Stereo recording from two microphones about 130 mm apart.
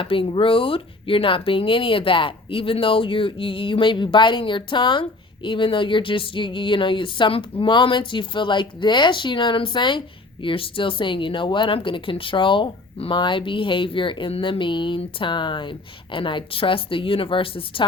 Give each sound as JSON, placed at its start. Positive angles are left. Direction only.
{"t": 0.0, "sound": "speech", "side_deg": 45}